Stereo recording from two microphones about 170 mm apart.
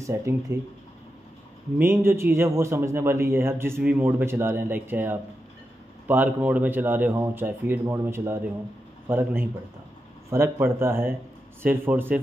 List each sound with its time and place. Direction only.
0.0 s a man's voice: 15° right (ahead or behind)
1.8 s a man's voice: 15° right (ahead or behind)